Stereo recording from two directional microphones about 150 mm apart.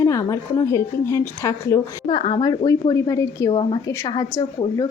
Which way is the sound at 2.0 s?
30° left (ahead or behind).